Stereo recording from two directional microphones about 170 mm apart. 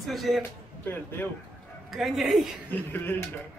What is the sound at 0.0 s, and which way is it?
Speech, centre (ahead or behind).